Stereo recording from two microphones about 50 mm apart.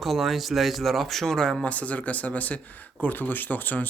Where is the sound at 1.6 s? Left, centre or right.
Left.